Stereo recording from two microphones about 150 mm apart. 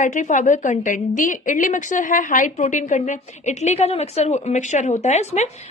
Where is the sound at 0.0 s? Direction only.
55° left (ahead or behind).